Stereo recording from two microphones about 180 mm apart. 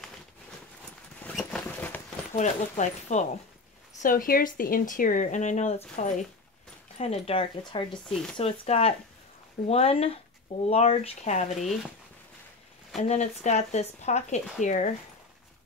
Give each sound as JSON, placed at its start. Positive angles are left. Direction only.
{"t": 1.2, "sound": "a sound", "side_deg": 5}
{"t": 2.3, "sound": "speech", "side_deg": 40}
{"t": 4.0, "sound": "speech", "side_deg": 50}
{"t": 12.9, "sound": "speech", "side_deg": 40}